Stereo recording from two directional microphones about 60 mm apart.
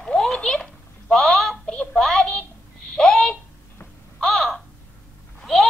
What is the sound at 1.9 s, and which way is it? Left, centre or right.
Child singing, centre.